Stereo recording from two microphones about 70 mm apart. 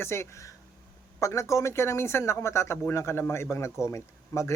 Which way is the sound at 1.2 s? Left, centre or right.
Left.